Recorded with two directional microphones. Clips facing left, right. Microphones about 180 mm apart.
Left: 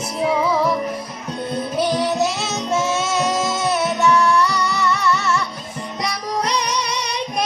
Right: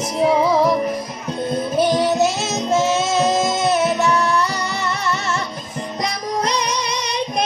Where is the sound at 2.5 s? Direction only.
40° right (ahead or behind).